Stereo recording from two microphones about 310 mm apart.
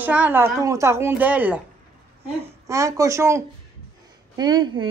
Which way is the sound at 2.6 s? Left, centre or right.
Centre.